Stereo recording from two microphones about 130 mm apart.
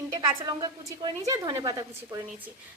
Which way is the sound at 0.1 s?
25° right (ahead or behind).